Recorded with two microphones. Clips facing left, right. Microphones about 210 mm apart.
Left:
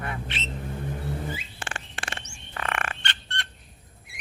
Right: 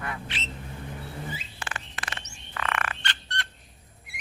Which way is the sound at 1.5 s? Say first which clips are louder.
Left 1 dB; 30° left (ahead or behind).